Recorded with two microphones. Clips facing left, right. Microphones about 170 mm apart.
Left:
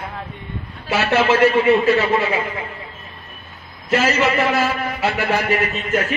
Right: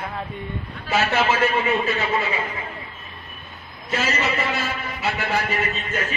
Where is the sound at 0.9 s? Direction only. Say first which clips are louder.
Left 4 dB; 85° left.